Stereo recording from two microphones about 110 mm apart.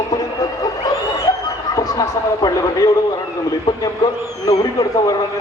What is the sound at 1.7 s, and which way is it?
A man's voice, 30° left (ahead or behind).